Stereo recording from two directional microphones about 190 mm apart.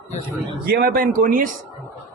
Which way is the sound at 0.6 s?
50° right (ahead or behind).